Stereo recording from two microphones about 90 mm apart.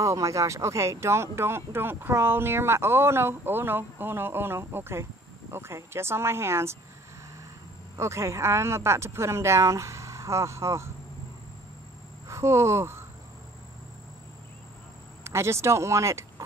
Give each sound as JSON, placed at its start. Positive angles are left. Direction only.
{"t": 0.0, "sound": "speech", "side_deg": -35}
{"t": 8.0, "sound": "speech", "side_deg": -30}
{"t": 12.3, "sound": "speech", "side_deg": -35}
{"t": 15.2, "sound": "speech", "side_deg": -30}